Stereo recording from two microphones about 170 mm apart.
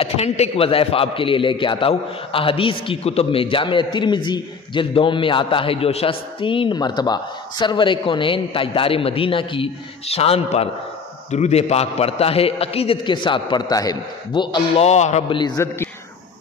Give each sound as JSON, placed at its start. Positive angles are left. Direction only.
{"t": 0.0, "sound": "a man's voice", "side_deg": 35}
{"t": 14.9, "sound": "a man's voice", "side_deg": 40}
{"t": 15.3, "sound": "a man's voice", "side_deg": 25}